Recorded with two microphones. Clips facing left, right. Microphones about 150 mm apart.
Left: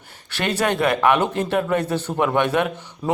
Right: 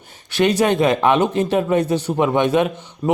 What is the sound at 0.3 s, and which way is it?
A man's voice, 15° right (ahead or behind).